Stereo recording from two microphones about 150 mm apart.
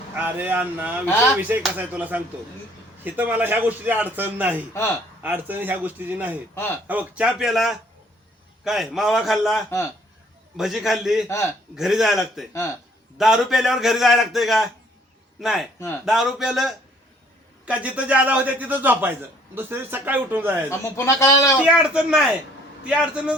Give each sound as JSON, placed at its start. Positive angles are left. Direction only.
{"t": 0.2, "sound": "a man's voice", "side_deg": -10}
{"t": 11.3, "sound": "a man's voice", "side_deg": 15}
{"t": 11.8, "sound": "a man's voice", "side_deg": 0}
{"t": 20.7, "sound": "speech", "side_deg": 20}
{"t": 21.6, "sound": "a man's voice", "side_deg": -10}